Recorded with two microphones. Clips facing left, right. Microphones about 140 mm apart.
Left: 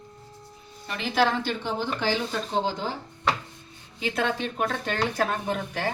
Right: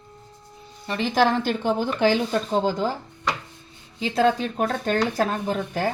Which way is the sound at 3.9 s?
35° right (ahead or behind).